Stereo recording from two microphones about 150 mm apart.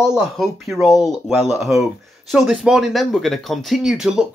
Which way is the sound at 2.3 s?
5° right (ahead or behind).